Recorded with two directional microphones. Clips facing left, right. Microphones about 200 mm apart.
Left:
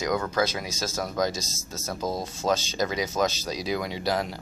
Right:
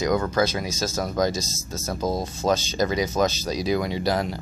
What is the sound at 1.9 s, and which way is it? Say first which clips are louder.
Speech: right 4 dB; 15° right (ahead or behind).